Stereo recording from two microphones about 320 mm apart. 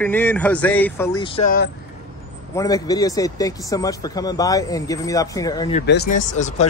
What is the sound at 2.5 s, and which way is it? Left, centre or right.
Speech, centre.